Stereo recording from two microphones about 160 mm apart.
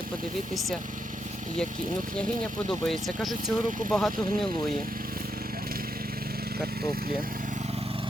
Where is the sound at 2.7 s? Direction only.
Centre (ahead or behind).